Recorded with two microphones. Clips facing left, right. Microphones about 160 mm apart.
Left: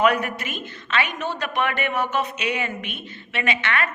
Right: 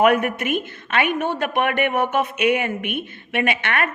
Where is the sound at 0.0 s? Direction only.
55° right (ahead or behind).